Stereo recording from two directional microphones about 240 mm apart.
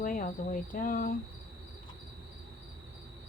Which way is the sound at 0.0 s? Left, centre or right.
Left.